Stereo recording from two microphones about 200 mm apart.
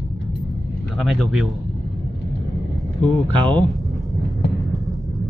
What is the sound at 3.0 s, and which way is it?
Speech, 5° left (ahead or behind).